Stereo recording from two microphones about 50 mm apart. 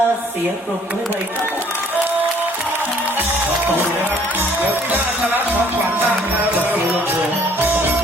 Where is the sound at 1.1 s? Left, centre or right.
Right.